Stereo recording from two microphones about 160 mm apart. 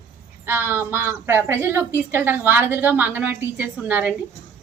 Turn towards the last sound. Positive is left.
turn(degrees=-10)  # may be behind; listen again after turning